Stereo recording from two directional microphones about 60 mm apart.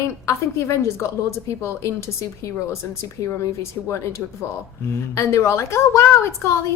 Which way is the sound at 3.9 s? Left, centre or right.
Left.